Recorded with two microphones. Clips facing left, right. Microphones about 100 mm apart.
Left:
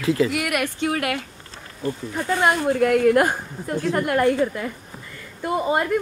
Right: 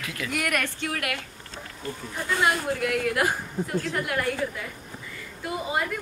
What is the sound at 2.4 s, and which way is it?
A woman's voice, 45° left (ahead or behind).